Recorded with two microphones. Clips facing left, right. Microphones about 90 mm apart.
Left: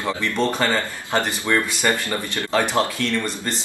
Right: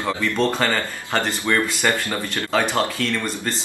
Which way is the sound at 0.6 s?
20° left (ahead or behind).